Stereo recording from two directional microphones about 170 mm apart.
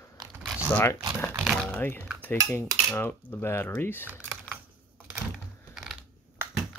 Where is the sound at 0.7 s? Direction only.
15° left (ahead or behind).